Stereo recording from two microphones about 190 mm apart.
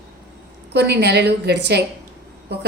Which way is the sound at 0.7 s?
60° right (ahead or behind).